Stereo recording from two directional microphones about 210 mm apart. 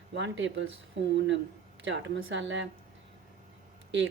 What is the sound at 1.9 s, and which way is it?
Speech, 60° right (ahead or behind).